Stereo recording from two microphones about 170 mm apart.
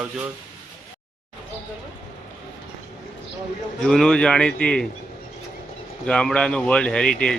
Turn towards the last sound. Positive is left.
turn(degrees=5)  # may be behind; listen again after turning